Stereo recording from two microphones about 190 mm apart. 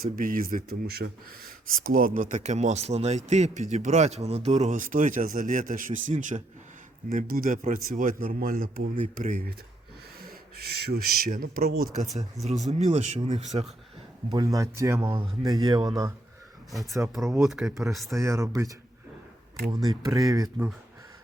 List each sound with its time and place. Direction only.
0.0 s speech: 50° right (ahead or behind)
12.5 s speech: 35° right (ahead or behind)
14.3 s speech: 20° right (ahead or behind)
17.2 s speech: centre (ahead or behind)
18.2 s speech: 15° right (ahead or behind)
19.7 s speech: 20° right (ahead or behind)